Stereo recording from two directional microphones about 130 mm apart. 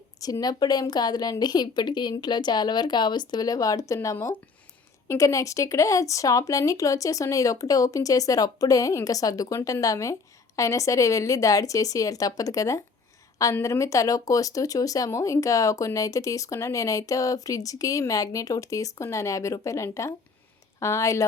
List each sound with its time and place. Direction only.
0.2 s a woman's voice: 30° left (ahead or behind)